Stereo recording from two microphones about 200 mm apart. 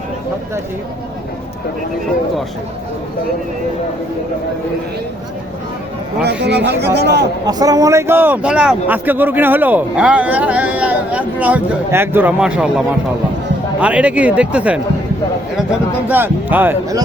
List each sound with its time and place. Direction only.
6.4 s speech: 60° right (ahead or behind)
7.4 s a man's voice: 20° right (ahead or behind)
13.8 s a man's voice: 5° right (ahead or behind)
16.0 s a man's voice: 10° right (ahead or behind)